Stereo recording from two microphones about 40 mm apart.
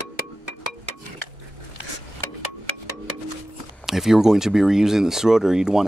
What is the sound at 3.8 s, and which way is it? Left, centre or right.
Speech, centre.